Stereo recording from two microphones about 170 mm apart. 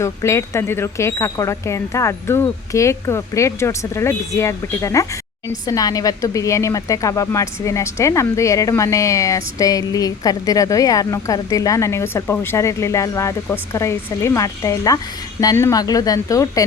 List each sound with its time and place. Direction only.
0.0 s a woman's voice: 15° left (ahead or behind)